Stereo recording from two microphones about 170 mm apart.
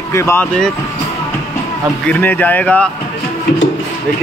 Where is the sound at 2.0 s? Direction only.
10° left (ahead or behind).